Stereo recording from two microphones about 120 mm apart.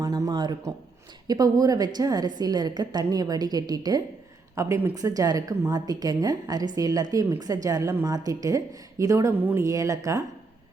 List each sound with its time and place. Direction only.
0.0 s a woman's voice: 30° right (ahead or behind)
9.4 s speech: 15° right (ahead or behind)
9.6 s speech: 25° right (ahead or behind)